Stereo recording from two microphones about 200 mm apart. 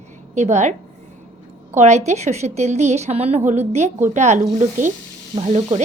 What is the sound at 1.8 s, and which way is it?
A woman's voice, 35° right (ahead or behind).